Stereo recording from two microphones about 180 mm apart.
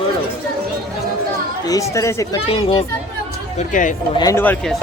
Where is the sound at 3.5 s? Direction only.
45° left (ahead or behind).